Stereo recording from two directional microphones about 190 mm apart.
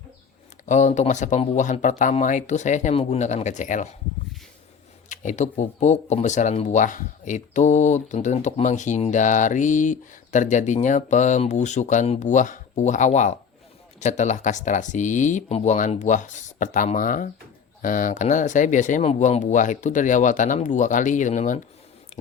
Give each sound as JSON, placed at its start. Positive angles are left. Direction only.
{"t": 0.6, "sound": "speech", "side_deg": 40}
{"t": 5.0, "sound": "speech", "side_deg": 40}